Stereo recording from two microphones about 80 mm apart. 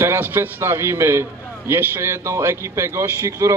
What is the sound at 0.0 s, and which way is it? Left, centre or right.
A man's voice, right.